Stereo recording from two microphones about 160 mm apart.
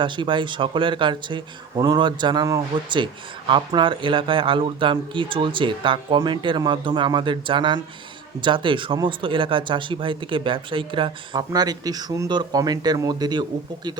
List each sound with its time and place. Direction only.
0.0 s speech: 30° right (ahead or behind)